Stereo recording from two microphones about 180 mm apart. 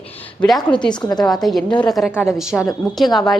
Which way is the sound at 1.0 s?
20° left (ahead or behind).